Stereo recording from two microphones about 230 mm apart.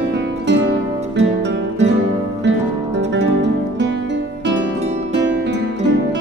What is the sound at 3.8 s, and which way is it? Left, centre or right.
Music, right.